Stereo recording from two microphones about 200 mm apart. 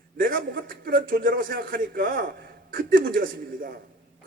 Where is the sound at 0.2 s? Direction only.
45° right (ahead or behind).